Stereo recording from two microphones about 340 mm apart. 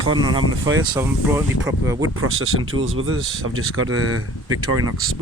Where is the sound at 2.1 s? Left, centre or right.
Right.